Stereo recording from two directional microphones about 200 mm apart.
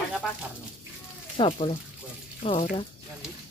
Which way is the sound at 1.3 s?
30° left (ahead or behind).